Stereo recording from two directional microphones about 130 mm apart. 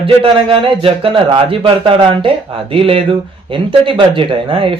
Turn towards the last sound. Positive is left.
turn(degrees=-45)  # may be behind; listen again after turning